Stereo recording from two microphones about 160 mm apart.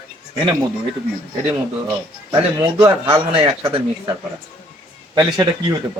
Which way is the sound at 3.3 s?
35° right (ahead or behind).